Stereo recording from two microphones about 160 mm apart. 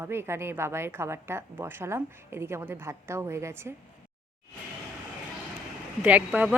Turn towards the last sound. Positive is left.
turn(degrees=-10)  # may be behind; listen again after turning